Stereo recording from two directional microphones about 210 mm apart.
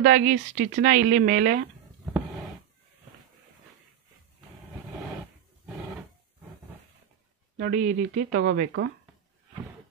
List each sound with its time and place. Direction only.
0.0 s speech: 35° right (ahead or behind)
7.5 s speech: 50° right (ahead or behind)